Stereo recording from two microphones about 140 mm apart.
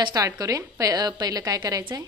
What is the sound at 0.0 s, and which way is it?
A woman's voice, 25° right (ahead or behind).